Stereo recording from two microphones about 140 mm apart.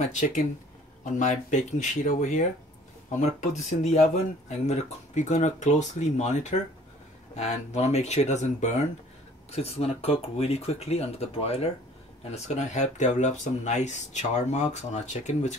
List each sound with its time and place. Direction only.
0.0 s speech: 65° left (ahead or behind)